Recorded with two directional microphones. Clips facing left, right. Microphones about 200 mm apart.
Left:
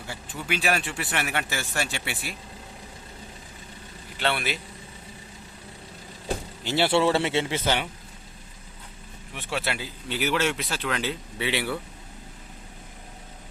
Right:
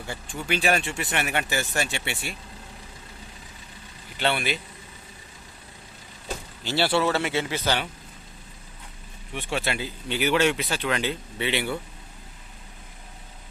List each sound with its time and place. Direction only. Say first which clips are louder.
0.1 s speech: right 2 dB; 5° left (ahead or behind)
4.2 s speech: right 2 dB; centre (ahead or behind)
6.7 s a man's voice: left 2 dB; 20° left (ahead or behind)
9.3 s speech: right 2 dB; 5° left (ahead or behind)